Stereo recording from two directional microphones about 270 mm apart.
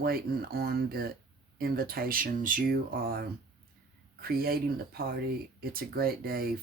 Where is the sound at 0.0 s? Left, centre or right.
Right.